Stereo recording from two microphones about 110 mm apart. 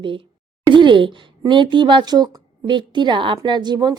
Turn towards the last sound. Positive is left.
turn(degrees=-40)  # may be behind; listen again after turning